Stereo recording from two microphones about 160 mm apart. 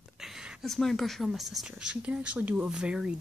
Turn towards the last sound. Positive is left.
turn(degrees=-5)  # may be behind; listen again after turning